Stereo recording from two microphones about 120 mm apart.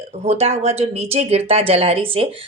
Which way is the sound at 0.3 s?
60° right (ahead or behind).